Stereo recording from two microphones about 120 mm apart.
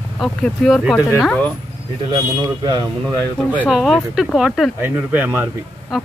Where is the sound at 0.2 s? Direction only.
5° left (ahead or behind).